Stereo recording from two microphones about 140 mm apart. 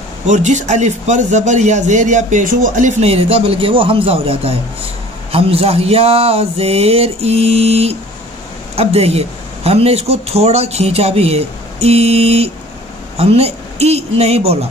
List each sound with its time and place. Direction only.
0.3 s a man's voice: 60° right (ahead or behind)